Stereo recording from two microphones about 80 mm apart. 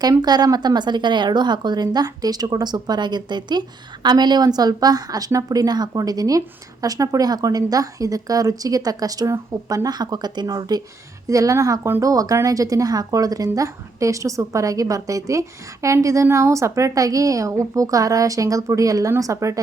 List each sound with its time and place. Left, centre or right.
0.0 s a woman's voice: right
11.3 s a woman's voice: right
11.8 s speech: right
12.0 s a woman's voice: right